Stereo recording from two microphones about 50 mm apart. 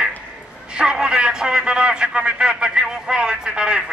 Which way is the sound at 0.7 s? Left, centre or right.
Centre.